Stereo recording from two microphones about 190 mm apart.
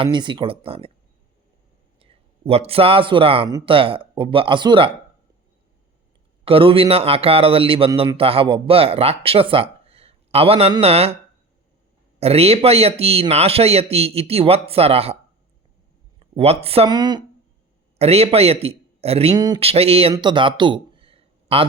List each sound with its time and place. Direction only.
0.0 s a man's voice: 25° right (ahead or behind)
2.0 s a man's voice: 30° right (ahead or behind)
6.4 s a man's voice: 30° right (ahead or behind)
12.2 s a man's voice: 30° right (ahead or behind)
16.3 s a man's voice: 35° right (ahead or behind)
18.0 s a man's voice: 35° right (ahead or behind)
20.1 s a sound: 25° right (ahead or behind)